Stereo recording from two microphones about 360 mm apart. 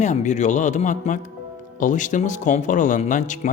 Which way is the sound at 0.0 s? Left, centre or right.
Centre.